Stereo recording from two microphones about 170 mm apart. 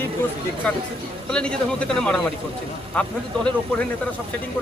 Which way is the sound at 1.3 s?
5° left (ahead or behind).